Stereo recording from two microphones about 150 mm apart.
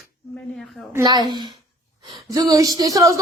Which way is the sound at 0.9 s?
25° right (ahead or behind).